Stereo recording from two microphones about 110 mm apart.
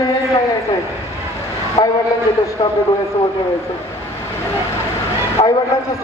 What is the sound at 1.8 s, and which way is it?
Speech, 55° left (ahead or behind).